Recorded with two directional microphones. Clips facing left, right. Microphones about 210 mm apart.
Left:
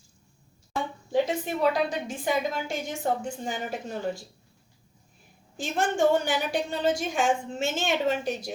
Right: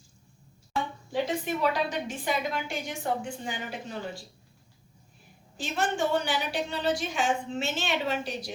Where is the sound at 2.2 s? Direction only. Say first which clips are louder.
Left 4 dB; 40° left (ahead or behind).